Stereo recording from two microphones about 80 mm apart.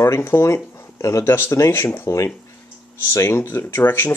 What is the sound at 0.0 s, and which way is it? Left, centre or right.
Speech, left.